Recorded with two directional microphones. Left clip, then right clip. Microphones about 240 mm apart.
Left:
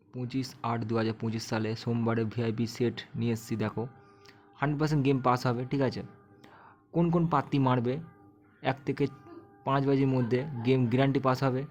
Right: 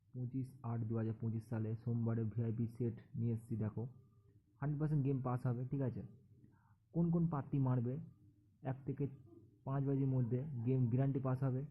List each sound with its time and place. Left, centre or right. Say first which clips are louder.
0.6 s speech: left 16 dB; centre